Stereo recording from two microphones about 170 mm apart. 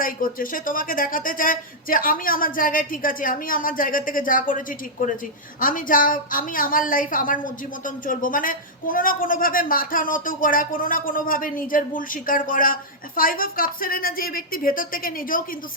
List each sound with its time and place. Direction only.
0.0 s a woman's voice: 55° left (ahead or behind)